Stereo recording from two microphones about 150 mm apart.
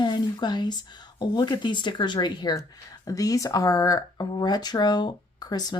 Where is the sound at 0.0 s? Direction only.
30° left (ahead or behind).